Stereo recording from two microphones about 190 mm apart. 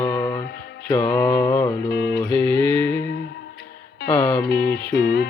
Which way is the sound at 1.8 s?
60° left (ahead or behind).